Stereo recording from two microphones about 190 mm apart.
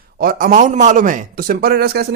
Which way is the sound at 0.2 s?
50° right (ahead or behind).